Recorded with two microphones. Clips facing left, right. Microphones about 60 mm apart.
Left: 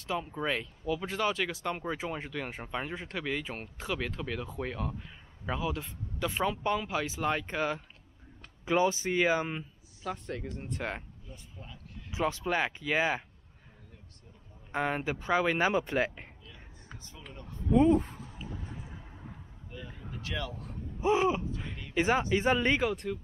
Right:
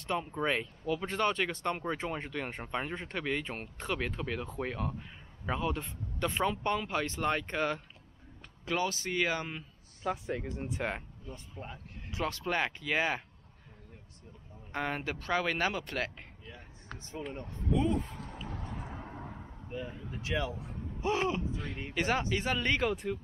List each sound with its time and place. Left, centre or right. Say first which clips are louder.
0.0 s speech: right 1 dB; centre
8.6 s speech: left 5 dB; centre
10.0 s speech: right 2 dB; centre
11.2 s speech: right 5 dB; right
12.1 s speech: left 3 dB; centre
14.7 s speech: left 4 dB; centre
17.1 s speech: right 9 dB; right
17.7 s speech: left 8 dB; left
18.1 s vehicle: right 1 dB; right
19.7 s speech: right 4 dB; right
21.0 s speech: left 4 dB; centre
22.8 s speech: left 1 dB; centre